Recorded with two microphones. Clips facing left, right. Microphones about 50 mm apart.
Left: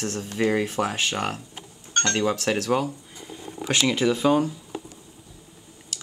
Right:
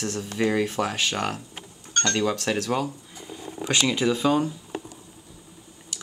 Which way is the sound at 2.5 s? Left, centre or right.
Centre.